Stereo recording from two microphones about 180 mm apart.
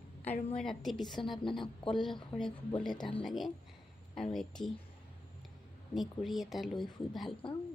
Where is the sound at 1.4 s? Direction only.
30° left (ahead or behind).